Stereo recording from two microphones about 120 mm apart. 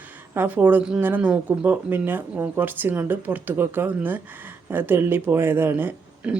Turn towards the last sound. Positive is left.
turn(degrees=-15)  # may be behind; listen again after turning